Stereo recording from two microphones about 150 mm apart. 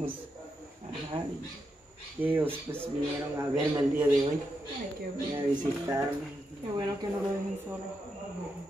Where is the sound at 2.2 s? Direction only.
10° right (ahead or behind).